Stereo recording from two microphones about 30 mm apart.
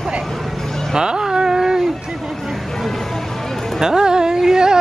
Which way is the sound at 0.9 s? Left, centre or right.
Right.